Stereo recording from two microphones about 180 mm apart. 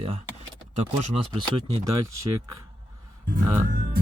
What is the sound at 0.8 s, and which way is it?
Speech, 35° right (ahead or behind).